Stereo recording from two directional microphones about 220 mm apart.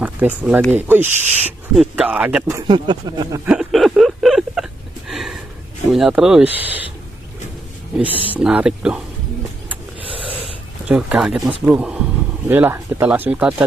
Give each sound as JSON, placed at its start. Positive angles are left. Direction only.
{"t": 0.0, "sound": "speech", "side_deg": -5}
{"t": 3.4, "sound": "a sound", "side_deg": 0}
{"t": 5.9, "sound": "speech", "side_deg": 0}
{"t": 8.3, "sound": "speech", "side_deg": -5}
{"t": 10.0, "sound": "wheeze", "side_deg": -25}
{"t": 10.9, "sound": "speech", "side_deg": -5}